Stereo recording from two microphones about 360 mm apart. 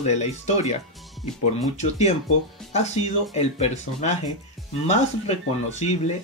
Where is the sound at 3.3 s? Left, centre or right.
Centre.